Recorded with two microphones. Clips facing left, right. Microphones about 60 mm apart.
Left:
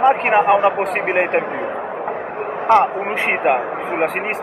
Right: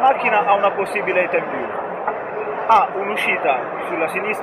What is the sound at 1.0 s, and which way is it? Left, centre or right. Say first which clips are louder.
Speech: even; centre.